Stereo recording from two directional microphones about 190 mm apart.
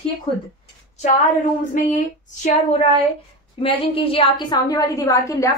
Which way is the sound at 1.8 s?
45° left (ahead or behind).